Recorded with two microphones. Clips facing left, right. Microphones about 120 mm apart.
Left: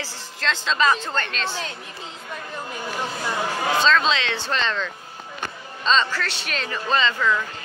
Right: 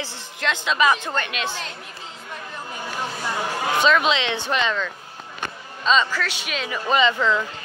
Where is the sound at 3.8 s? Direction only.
15° right (ahead or behind).